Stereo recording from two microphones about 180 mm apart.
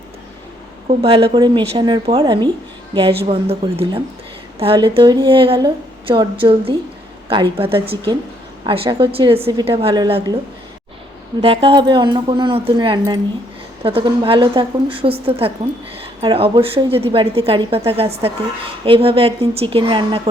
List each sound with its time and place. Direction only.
0.9 s a woman's voice: 30° right (ahead or behind)
8.6 s a woman's voice: 30° right (ahead or behind)
11.4 s a woman's voice: 30° right (ahead or behind)